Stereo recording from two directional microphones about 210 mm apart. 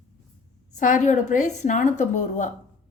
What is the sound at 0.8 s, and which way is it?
A woman's voice, 35° left (ahead or behind).